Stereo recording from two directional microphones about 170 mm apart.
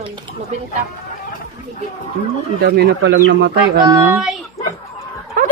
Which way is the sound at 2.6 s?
80° right.